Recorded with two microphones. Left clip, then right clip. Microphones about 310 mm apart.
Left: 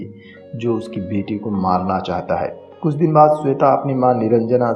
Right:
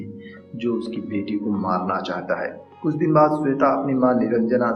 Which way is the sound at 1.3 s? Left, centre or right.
Left.